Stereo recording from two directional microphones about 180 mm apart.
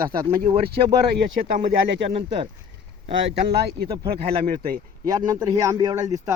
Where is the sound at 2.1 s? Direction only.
30° right (ahead or behind).